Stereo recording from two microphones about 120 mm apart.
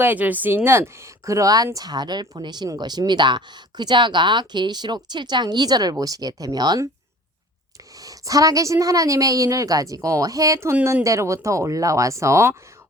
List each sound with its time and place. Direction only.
0.0 s speech: 15° right (ahead or behind); by 6.8 s 35° right (ahead or behind)
8.0 s a woman's voice: 30° right (ahead or behind)